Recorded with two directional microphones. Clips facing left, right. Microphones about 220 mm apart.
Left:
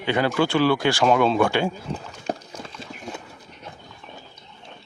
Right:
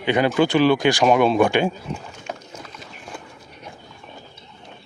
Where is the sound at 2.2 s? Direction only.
35° left (ahead or behind).